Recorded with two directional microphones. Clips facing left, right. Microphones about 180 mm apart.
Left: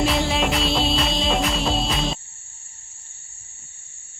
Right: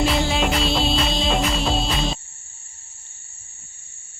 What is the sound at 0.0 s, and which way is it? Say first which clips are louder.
Music: right 1 dB; centre (ahead or behind).